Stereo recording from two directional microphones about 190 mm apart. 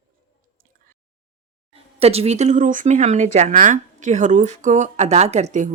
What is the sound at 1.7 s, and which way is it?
Speech, 30° right (ahead or behind).